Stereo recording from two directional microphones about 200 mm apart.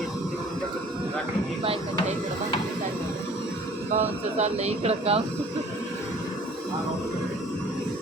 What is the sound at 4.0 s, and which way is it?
Speech, 35° right (ahead or behind).